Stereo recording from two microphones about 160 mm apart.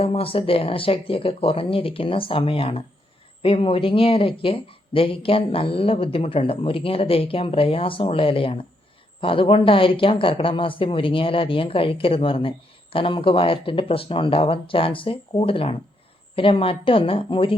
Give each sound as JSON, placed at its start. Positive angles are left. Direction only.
{"t": 0.0, "sound": "speech", "side_deg": 35}